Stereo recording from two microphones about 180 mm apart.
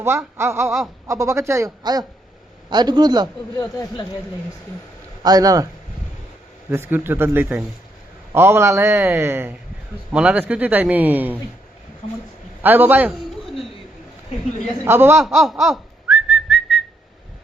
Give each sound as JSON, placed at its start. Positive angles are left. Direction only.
{"t": 0.0, "sound": "a man's voice", "side_deg": -15}
{"t": 3.6, "sound": "speech", "side_deg": 25}
{"t": 5.2, "sound": "a man's voice", "side_deg": -20}
{"t": 6.7, "sound": "a man's voice", "side_deg": -15}
{"t": 12.6, "sound": "a man's voice", "side_deg": -10}
{"t": 14.8, "sound": "a man's voice", "side_deg": -15}
{"t": 15.6, "sound": "whistling", "side_deg": 0}